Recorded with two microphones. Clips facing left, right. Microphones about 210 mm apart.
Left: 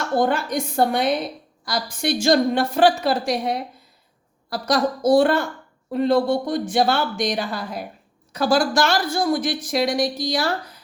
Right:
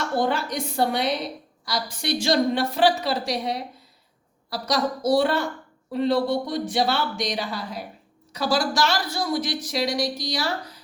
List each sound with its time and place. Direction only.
0.2 s a woman's voice: 50° left (ahead or behind)